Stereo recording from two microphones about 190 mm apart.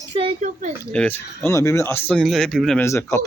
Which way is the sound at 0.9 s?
10° left (ahead or behind).